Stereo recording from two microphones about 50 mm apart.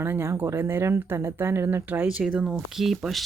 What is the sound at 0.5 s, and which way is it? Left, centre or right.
Speech, right.